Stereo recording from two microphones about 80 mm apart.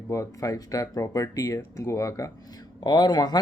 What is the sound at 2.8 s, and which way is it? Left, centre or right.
Speech, left.